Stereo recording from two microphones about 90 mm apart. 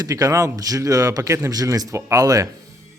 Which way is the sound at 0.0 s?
45° right (ahead or behind).